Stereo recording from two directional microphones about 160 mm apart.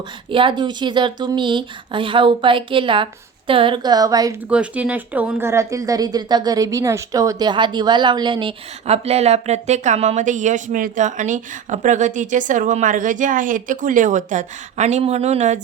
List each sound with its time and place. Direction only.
0.3 s speech: 30° right (ahead or behind)
4.4 s speech: 10° right (ahead or behind); by 15.6 s 45° right (ahead or behind)